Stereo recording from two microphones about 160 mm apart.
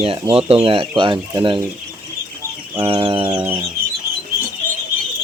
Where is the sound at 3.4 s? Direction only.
15° right (ahead or behind).